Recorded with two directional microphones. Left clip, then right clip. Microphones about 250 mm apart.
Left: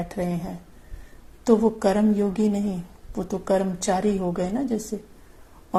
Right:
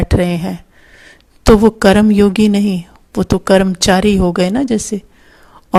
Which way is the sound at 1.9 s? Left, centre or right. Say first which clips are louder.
Right 12 dB; right.